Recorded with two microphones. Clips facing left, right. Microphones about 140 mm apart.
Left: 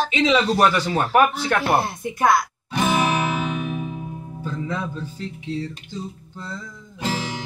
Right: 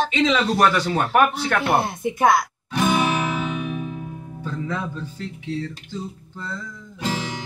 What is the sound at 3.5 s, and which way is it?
Music, 10° left (ahead or behind).